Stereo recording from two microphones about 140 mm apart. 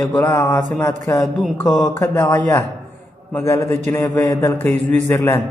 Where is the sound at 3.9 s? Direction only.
20° left (ahead or behind).